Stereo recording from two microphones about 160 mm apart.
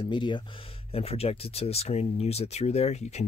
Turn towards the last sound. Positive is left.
turn(degrees=45)  # may be behind; listen again after turning